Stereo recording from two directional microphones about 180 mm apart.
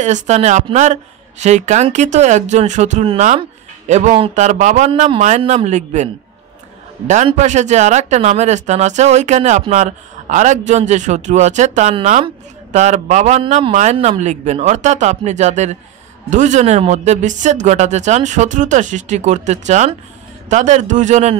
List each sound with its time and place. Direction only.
0.0 s speech: 40° right (ahead or behind)
7.2 s speech: 40° right (ahead or behind)